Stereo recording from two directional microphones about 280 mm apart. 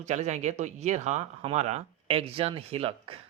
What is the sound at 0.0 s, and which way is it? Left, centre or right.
Speech, right.